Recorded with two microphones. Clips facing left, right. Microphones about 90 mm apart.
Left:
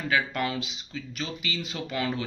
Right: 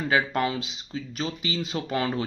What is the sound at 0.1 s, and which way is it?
Speech, 30° right (ahead or behind).